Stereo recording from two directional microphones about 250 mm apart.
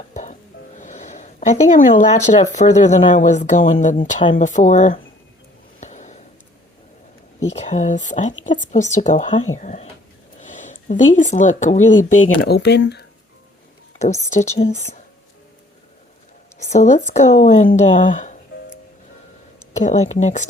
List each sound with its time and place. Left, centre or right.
0.1 s music: left
1.9 s speech: left
5.8 s a sound: left
7.5 s speech: left
12.2 s speech: left
14.3 s speech: left
16.6 s speech: left
19.7 s speech: left